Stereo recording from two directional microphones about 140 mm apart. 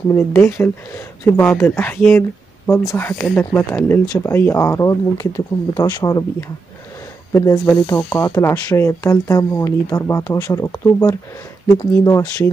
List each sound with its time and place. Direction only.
0.1 s speech: 15° left (ahead or behind)
7.3 s speech: 25° left (ahead or behind)